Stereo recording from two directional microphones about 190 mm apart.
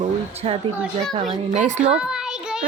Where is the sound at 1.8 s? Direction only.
5° right (ahead or behind).